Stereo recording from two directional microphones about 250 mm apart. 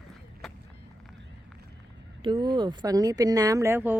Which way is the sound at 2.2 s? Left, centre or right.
Centre.